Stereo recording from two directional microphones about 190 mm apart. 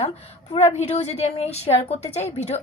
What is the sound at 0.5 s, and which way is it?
A woman's voice, 35° left (ahead or behind).